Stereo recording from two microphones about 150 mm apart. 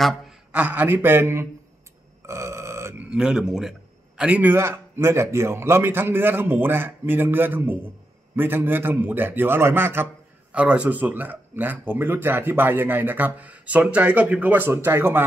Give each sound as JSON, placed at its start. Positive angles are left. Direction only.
{"t": 0.0, "sound": "a sound", "side_deg": 0}
{"t": 0.5, "sound": "speech", "side_deg": -10}
{"t": 2.2, "sound": "burping", "side_deg": -20}
{"t": 3.1, "sound": "a man's voice", "side_deg": -5}